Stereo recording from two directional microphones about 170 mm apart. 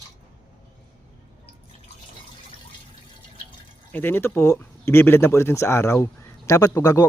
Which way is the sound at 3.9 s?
10° left (ahead or behind).